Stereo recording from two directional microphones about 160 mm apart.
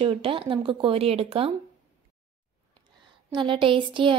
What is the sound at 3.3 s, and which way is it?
Speech, 30° right (ahead or behind).